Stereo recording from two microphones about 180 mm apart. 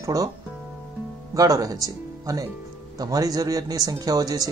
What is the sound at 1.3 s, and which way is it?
Speech, 20° right (ahead or behind).